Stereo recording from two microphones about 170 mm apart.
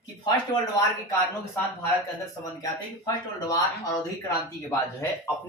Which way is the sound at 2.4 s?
20° left (ahead or behind).